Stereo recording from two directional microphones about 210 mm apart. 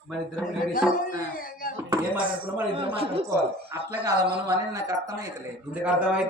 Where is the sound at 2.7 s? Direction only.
25° right (ahead or behind).